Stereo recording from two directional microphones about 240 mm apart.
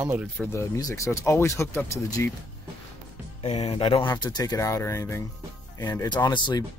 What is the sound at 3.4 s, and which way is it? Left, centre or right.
Speech, left.